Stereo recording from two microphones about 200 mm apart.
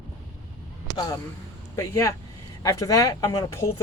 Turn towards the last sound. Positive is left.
turn(degrees=15)  # may be behind; listen again after turning